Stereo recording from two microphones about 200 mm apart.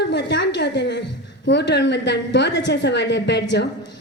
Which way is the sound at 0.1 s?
60° left (ahead or behind).